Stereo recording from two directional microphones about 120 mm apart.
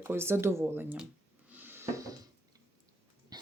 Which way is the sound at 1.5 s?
15° right (ahead or behind).